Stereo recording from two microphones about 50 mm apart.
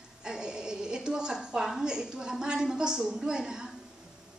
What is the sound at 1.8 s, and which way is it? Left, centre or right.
A woman's voice, centre.